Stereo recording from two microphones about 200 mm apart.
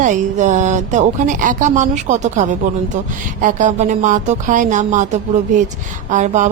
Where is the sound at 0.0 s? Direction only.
40° right (ahead or behind).